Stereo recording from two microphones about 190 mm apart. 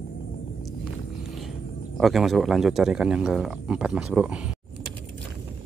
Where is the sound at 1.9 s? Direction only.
Centre (ahead or behind).